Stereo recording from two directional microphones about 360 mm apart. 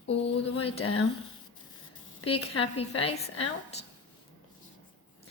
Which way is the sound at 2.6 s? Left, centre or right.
Centre.